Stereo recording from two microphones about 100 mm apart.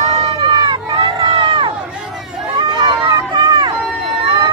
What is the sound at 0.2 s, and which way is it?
Run, 55° right (ahead or behind).